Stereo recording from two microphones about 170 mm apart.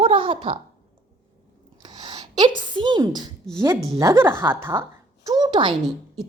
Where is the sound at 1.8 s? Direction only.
25° right (ahead or behind).